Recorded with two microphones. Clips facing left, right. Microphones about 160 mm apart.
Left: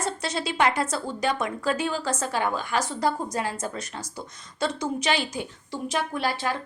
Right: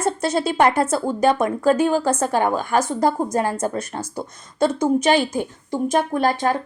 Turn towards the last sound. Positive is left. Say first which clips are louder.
# right 8 dB
turn(degrees=-45)  # may be behind; listen again after turning